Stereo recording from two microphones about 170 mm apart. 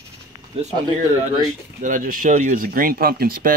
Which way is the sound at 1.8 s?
50° right (ahead or behind).